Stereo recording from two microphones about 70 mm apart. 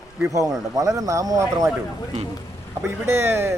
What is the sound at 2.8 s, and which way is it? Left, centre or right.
Speech, right.